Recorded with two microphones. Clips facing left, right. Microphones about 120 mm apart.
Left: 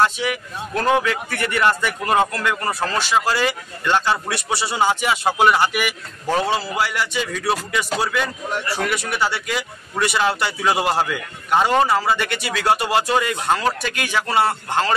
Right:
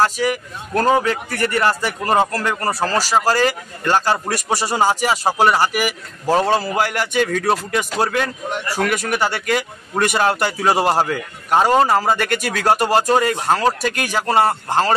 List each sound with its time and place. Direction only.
0.0 s speech: 40° right (ahead or behind)